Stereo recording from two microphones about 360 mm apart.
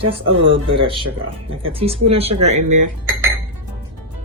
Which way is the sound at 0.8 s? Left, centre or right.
Centre.